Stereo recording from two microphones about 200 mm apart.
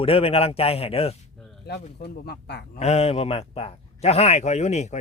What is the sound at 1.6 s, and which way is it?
Speech, 55° left (ahead or behind).